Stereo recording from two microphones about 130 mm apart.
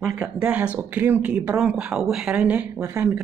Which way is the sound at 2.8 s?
20° right (ahead or behind).